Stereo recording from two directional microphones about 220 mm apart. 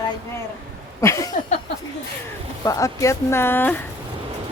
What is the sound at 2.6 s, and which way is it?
Speech, 15° left (ahead or behind).